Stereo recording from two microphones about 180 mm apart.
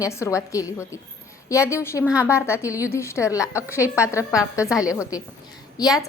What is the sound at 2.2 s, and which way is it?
Speech, 15° left (ahead or behind).